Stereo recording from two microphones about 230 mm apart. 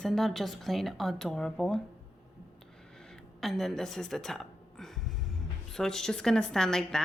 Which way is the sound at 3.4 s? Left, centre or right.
Centre.